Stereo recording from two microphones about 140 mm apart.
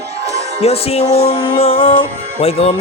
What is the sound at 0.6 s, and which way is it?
Music, 45° left (ahead or behind).